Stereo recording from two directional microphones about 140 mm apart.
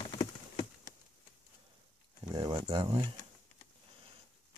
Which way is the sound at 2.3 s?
30° right (ahead or behind).